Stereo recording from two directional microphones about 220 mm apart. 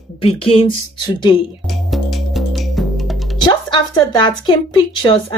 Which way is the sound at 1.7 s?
Centre (ahead or behind).